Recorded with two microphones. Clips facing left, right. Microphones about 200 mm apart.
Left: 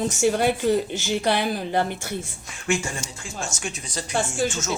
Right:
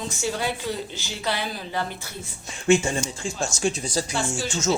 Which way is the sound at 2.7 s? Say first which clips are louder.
Right 6 dB; 25° right (ahead or behind).